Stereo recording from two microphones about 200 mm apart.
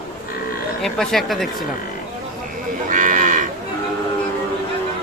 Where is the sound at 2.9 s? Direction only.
40° right (ahead or behind).